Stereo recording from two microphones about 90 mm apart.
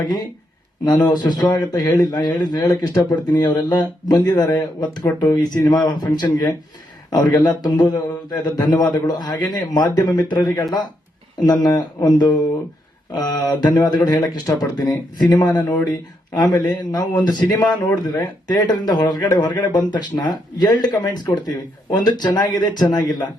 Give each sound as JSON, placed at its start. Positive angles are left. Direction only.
{"t": 0.9, "sound": "speech", "side_deg": 50}